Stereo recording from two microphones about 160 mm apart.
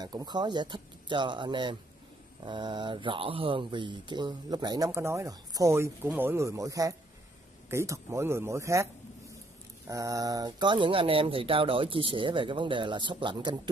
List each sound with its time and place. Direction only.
0.0 s speech: 25° right (ahead or behind)
9.8 s speech: 20° right (ahead or behind)